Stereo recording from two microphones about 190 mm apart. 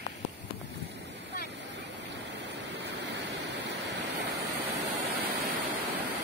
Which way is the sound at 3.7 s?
70° right (ahead or behind).